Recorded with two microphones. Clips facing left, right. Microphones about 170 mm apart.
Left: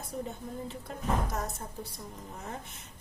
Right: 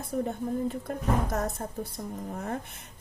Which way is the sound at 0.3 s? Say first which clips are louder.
Right 9 dB; 55° right (ahead or behind).